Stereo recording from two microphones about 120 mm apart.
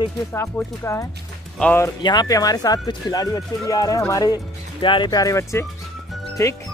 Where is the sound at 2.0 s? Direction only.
35° left (ahead or behind).